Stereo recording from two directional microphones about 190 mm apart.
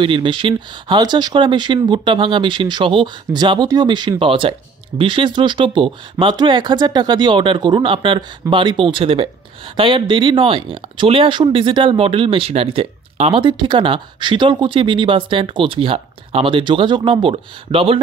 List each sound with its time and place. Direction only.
0.0 s speech: 25° right (ahead or behind)